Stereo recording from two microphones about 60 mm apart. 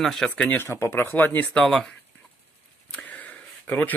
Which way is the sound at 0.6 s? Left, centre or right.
Left.